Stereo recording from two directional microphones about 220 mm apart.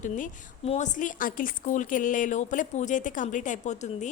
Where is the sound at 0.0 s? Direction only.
30° left (ahead or behind).